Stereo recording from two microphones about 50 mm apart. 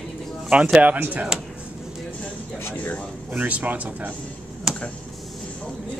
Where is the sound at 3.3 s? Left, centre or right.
Right.